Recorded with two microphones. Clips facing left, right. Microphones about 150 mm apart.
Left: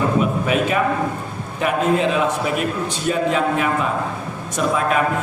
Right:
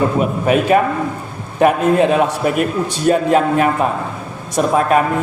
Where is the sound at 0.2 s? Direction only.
45° right (ahead or behind).